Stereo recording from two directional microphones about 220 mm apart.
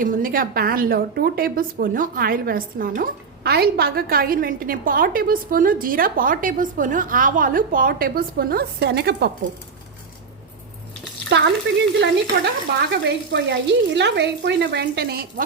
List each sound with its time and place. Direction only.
0.0 s a woman's voice: 40° right (ahead or behind)
11.3 s frying: 50° right (ahead or behind)
12.9 s speech: 50° right (ahead or behind)